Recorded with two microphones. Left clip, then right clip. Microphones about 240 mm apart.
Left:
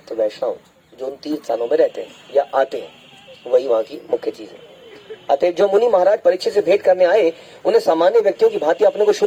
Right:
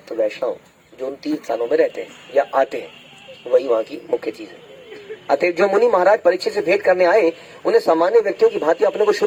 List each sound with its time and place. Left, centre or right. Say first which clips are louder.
0.4 s speech: left 1 dB; left